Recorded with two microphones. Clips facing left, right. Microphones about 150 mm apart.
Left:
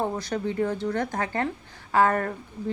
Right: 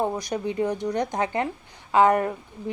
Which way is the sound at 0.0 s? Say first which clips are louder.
Right 1 dB; 15° right (ahead or behind).